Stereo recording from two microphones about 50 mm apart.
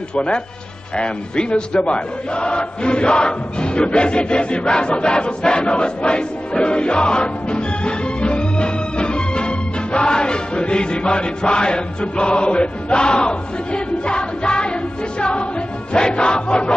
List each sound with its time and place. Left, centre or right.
0.1 s music: left
0.9 s speech: centre
14.0 s music: centre